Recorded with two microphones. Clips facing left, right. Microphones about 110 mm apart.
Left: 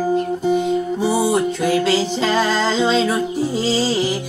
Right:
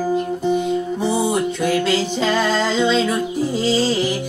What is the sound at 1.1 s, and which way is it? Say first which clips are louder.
Music: left 2 dB; 35° left (ahead or behind).